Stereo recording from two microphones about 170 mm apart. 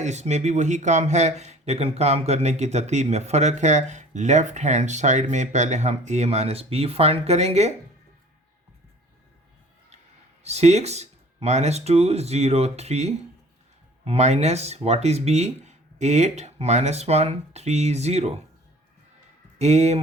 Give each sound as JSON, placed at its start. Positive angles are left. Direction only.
{"t": 0.0, "sound": "speech", "side_deg": -40}
{"t": 10.4, "sound": "speech", "side_deg": -40}
{"t": 19.5, "sound": "speech", "side_deg": -40}